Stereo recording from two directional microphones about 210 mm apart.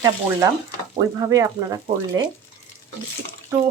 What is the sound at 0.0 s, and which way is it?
Speech, 15° right (ahead or behind).